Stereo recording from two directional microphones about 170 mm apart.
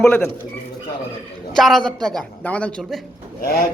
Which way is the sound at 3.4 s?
65° left (ahead or behind).